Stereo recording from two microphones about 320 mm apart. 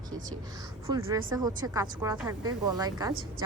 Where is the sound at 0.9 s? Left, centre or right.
Centre.